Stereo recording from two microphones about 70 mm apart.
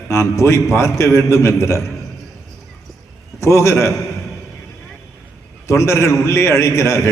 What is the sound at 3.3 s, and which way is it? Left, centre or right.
Speech, left.